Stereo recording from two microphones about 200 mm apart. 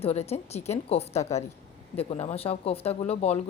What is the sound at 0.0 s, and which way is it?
A woman's voice, 30° left (ahead or behind).